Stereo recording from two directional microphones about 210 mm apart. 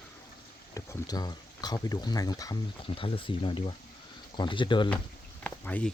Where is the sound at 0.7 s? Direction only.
15° left (ahead or behind).